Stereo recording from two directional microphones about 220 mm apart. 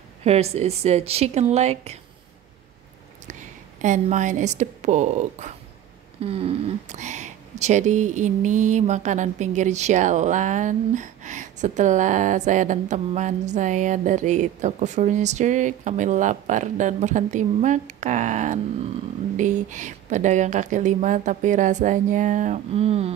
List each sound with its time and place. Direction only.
0.2 s speech: 30° right (ahead or behind)
3.3 s a woman's voice: 35° right (ahead or behind)